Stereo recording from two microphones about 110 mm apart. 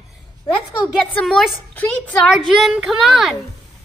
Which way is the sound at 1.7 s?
15° left (ahead or behind).